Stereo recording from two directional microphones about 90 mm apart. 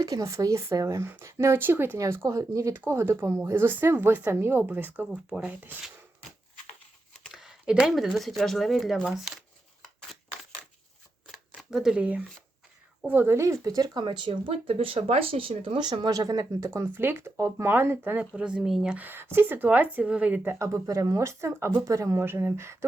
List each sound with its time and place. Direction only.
0.0 s speech: 40° right (ahead or behind); by 5.7 s 20° right (ahead or behind)
7.3 s a sound: 5° right (ahead or behind)
7.9 s speech: centre (ahead or behind)
11.3 s shuffling cards: 5° right (ahead or behind)
13.1 s speech: 25° right (ahead or behind); by 15.9 s 85° right
15.9 s speech: 50° right (ahead or behind); by 18.3 s 20° right (ahead or behind)
18.3 s speech: 10° right (ahead or behind)
18.9 s speech: 20° right (ahead or behind)